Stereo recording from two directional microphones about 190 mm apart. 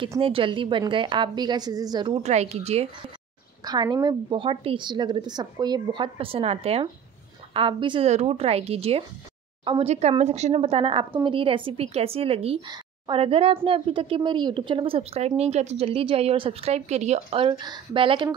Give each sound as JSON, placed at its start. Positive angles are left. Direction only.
{"t": 0.0, "sound": "a woman's voice", "side_deg": -25}
{"t": 3.6, "sound": "a woman's voice", "side_deg": -20}